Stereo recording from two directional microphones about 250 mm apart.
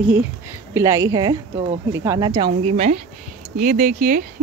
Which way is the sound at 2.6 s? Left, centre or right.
Right.